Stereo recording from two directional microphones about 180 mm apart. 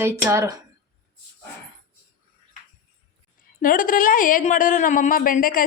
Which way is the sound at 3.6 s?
50° left (ahead or behind).